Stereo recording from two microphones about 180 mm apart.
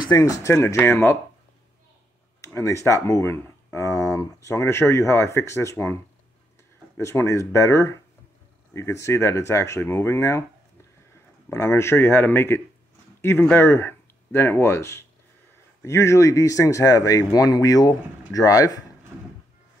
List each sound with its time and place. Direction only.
0.1 s speech: 20° left (ahead or behind)
2.4 s speech: 15° left (ahead or behind)
7.0 s speech: 15° left (ahead or behind)
11.4 s speech: 15° left (ahead or behind)